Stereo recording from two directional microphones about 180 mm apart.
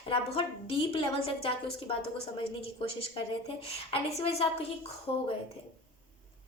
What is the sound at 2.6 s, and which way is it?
A woman's voice, 30° left (ahead or behind).